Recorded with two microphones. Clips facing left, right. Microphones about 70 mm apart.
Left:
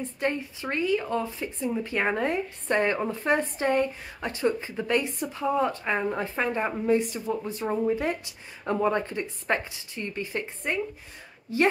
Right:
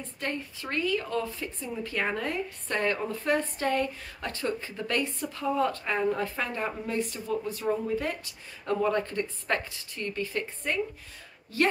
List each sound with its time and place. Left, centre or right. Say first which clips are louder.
0.2 s speech: left 5 dB; centre